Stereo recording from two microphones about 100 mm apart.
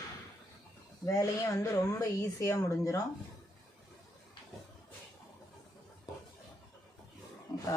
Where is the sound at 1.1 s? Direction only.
35° left (ahead or behind).